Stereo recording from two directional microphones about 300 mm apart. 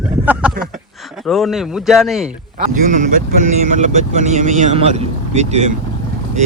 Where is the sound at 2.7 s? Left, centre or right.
Right.